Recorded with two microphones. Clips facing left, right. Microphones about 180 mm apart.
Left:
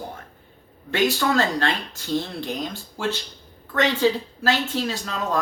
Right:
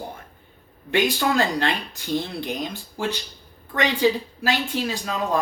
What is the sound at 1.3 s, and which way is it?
Speech, 15° right (ahead or behind).